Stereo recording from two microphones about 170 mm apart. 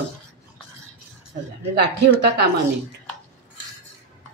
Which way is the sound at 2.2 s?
75° right (ahead or behind).